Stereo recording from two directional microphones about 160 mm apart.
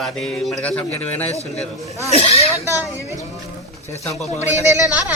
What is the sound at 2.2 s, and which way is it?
Speech, 40° left (ahead or behind).